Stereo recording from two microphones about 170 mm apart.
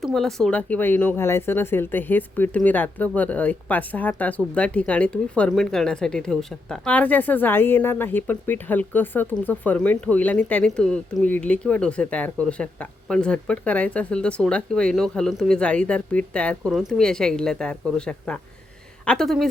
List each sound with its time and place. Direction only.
0.0 s a woman's voice: 5° left (ahead or behind)